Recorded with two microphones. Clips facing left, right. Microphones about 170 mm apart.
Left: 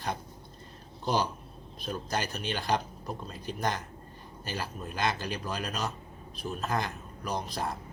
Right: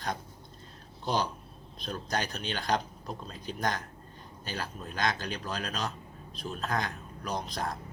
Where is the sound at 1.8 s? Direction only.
5° left (ahead or behind).